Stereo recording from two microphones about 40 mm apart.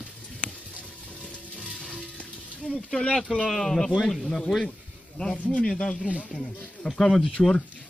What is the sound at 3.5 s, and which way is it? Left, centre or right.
Speech, centre.